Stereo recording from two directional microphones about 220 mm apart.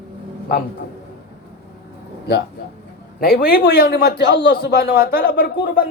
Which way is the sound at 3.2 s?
45° left (ahead or behind).